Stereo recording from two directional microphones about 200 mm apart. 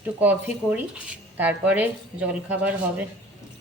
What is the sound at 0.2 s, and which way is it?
Speech, 10° right (ahead or behind).